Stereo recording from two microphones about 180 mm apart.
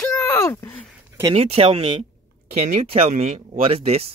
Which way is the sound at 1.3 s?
35° right (ahead or behind).